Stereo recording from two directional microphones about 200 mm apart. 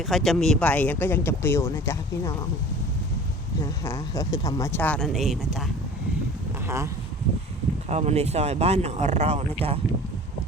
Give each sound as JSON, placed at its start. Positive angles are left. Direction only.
{"t": 0.0, "sound": "speech", "side_deg": 0}
{"t": 3.6, "sound": "speech", "side_deg": 15}
{"t": 7.9, "sound": "speech", "side_deg": -35}